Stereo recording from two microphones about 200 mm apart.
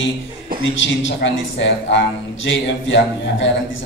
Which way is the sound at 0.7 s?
65° left (ahead or behind).